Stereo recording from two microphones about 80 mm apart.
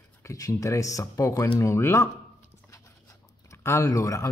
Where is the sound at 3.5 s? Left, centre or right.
Left.